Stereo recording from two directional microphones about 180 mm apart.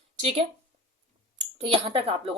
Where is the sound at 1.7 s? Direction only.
30° right (ahead or behind).